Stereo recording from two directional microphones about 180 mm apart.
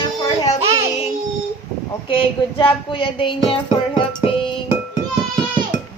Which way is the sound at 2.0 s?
30° left (ahead or behind).